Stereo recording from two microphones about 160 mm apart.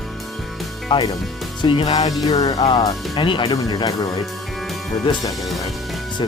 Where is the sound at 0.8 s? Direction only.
25° left (ahead or behind).